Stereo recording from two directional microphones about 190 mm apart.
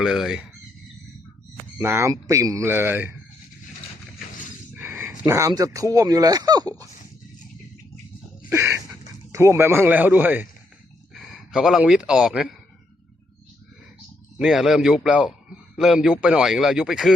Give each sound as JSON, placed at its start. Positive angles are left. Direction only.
{"t": 0.0, "sound": "a man's voice", "side_deg": 0}
{"t": 1.8, "sound": "speech", "side_deg": -15}
{"t": 4.7, "sound": "speech", "side_deg": -10}
{"t": 8.4, "sound": "a sound", "side_deg": -15}
{"t": 11.1, "sound": "speech", "side_deg": 0}
{"t": 14.3, "sound": "a man's voice", "side_deg": -5}